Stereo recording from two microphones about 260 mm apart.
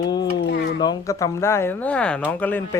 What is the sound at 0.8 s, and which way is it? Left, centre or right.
Speech, centre.